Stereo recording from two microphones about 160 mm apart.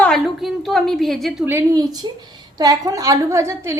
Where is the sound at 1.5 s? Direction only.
20° right (ahead or behind).